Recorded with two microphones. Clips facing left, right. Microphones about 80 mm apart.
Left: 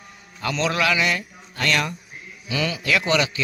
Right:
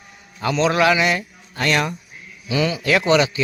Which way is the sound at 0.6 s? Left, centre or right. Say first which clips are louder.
Right 5 dB; right.